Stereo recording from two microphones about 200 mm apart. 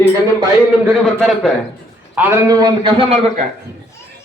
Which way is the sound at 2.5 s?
20° right (ahead or behind).